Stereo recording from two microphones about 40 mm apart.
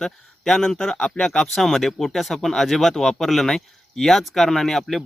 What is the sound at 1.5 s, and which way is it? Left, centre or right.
Speech, centre.